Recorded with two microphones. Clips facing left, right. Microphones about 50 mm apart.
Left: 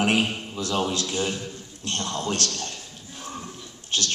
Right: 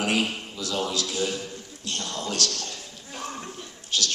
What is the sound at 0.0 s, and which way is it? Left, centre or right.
A man's voice, left.